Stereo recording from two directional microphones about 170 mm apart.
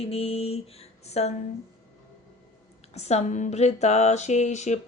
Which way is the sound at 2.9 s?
40° left (ahead or behind).